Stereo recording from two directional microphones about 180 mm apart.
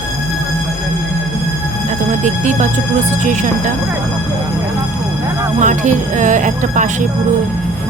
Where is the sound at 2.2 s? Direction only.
40° right (ahead or behind).